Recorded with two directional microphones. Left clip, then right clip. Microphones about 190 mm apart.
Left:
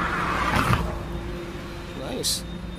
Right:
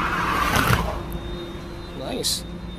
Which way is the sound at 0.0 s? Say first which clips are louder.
Right 2 dB; 60° right (ahead or behind).